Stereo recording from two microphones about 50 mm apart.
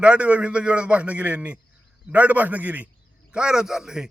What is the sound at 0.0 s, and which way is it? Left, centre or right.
A man's voice, right.